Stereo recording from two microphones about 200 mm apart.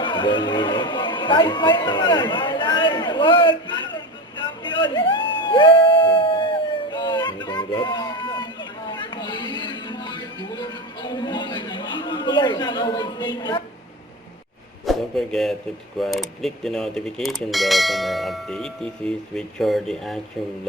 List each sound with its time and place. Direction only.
0.0 s speech: 25° left (ahead or behind)
4.4 s a sound: 25° left (ahead or behind)
8.9 s music: 25° left (ahead or behind)
14.8 s mechanisms: centre (ahead or behind)